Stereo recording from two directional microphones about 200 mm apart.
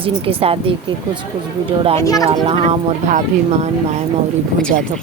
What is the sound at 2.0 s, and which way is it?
Speech, 15° left (ahead or behind).